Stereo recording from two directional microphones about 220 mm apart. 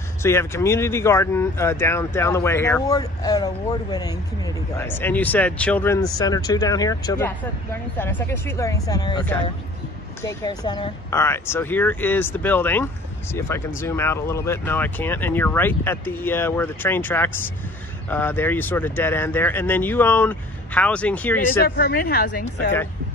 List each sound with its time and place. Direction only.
0.2 s speech: 10° left (ahead or behind)
10.2 s speech: 15° left (ahead or behind)
21.6 s speech: 45° left (ahead or behind)